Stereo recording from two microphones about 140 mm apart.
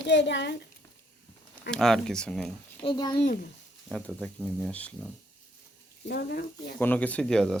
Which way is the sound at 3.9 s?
10° left (ahead or behind).